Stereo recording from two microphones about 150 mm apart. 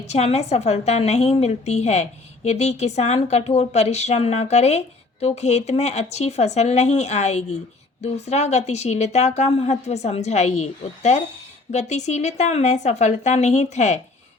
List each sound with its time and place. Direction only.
0.0 s a woman's voice: 45° left (ahead or behind)